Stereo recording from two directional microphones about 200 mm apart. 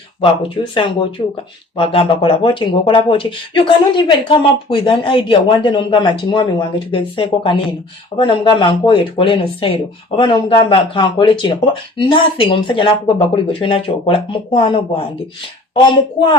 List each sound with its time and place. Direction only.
0.2 s speech: 25° left (ahead or behind)